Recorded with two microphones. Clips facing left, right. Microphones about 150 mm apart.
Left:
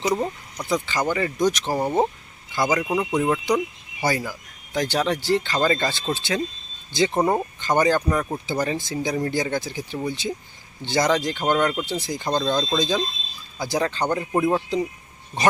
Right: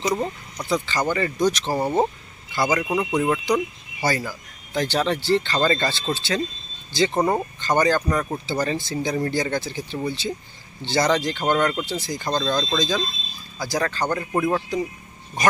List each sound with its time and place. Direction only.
0.0 s speech: 10° left (ahead or behind)
1.7 s speech: centre (ahead or behind); by 7.2 s 20° left (ahead or behind)
7.2 s speech: 5° left (ahead or behind)
11.9 s speech: 20° left (ahead or behind)
12.8 s speech: 20° left (ahead or behind)